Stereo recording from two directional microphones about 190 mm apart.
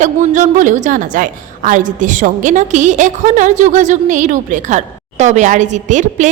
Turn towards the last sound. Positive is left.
turn(degrees=-40)  # may be behind; listen again after turning